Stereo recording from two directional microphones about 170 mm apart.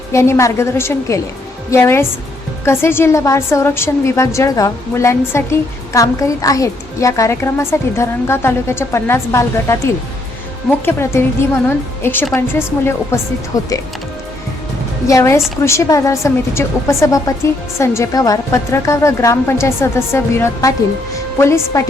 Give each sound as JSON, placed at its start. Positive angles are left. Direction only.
{"t": 0.1, "sound": "a woman's voice", "side_deg": 15}
{"t": 12.3, "sound": "a woman's voice", "side_deg": 15}
{"t": 15.0, "sound": "a woman's voice", "side_deg": 15}